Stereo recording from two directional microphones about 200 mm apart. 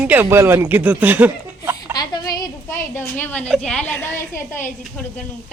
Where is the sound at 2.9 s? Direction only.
10° left (ahead or behind).